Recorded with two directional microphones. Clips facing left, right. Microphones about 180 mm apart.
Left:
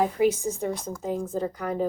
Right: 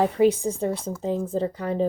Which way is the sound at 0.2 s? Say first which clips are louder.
Right 3 dB; 30° right (ahead or behind).